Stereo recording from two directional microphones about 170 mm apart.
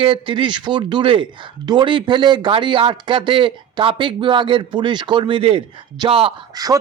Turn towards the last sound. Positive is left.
turn(degrees=-20)  # may be behind; listen again after turning